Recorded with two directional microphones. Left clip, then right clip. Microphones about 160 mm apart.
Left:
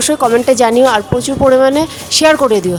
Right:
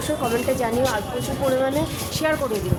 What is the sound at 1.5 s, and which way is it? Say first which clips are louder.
Speech: left 12 dB; 90° right.